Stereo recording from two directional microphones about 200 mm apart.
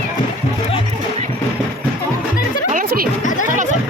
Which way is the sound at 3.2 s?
40° left (ahead or behind).